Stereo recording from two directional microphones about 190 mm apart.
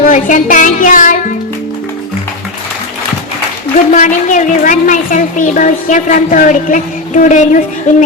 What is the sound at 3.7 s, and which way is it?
A woman's voice, 40° left (ahead or behind).